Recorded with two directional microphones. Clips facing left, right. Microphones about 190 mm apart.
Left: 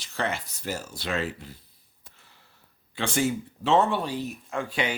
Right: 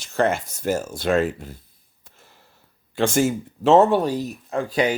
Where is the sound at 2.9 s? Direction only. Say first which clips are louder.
Right 6 dB; 45° right (ahead or behind).